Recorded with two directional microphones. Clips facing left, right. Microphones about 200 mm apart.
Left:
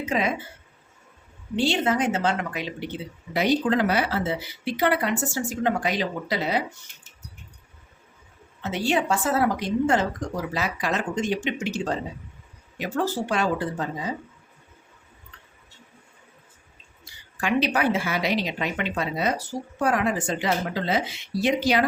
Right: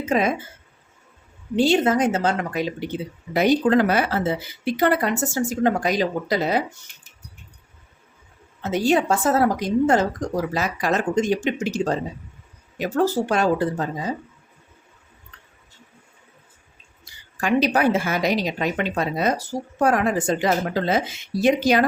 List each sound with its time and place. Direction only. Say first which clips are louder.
0.0 s speech: right 4 dB; 45° right (ahead or behind)
1.5 s a woman's voice: right 5 dB; 45° right (ahead or behind)
8.6 s speech: right 5 dB; 40° right (ahead or behind)
12.8 s speech: right 5 dB; 45° right (ahead or behind)
17.4 s speech: right 4 dB; 40° right (ahead or behind)